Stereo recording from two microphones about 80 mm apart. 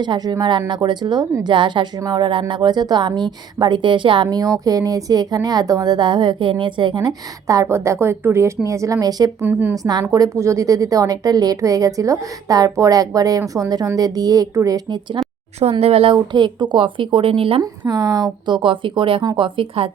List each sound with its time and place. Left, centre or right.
0.0 s speech: right
4.4 s speech: right
7.4 s a woman's voice: right
9.4 s a woman's voice: right
9.7 s a woman's voice: right
15.7 s speech: right
17.6 s speech: right